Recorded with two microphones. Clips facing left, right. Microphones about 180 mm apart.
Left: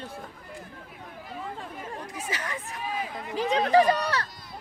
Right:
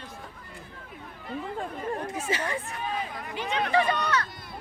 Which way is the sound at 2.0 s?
30° right (ahead or behind).